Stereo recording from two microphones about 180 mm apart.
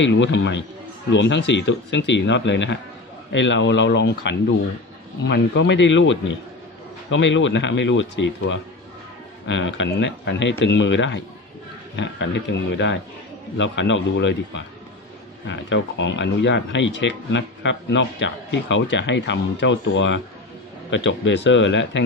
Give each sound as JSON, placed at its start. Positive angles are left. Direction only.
{"t": 0.0, "sound": "speech", "side_deg": 85}